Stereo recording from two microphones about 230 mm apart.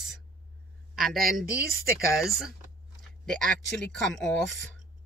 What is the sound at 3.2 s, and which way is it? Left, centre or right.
Speech, centre.